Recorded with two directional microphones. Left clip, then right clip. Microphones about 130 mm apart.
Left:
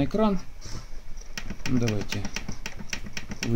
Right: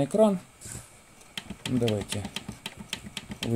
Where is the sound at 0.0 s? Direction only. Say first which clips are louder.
Right 3 dB; 55° right (ahead or behind).